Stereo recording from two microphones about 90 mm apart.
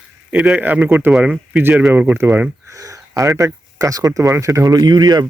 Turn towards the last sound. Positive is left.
turn(degrees=-50)  # may be behind; listen again after turning